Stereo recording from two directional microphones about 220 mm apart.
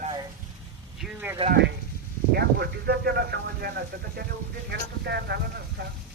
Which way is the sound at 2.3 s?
45° right (ahead or behind).